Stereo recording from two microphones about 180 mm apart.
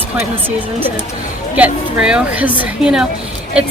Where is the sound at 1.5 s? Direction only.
5° right (ahead or behind).